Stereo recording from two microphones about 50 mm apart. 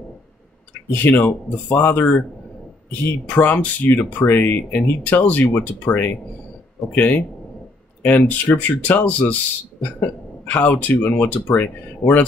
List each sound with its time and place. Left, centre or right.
0.9 s speech: left
8.0 s speech: left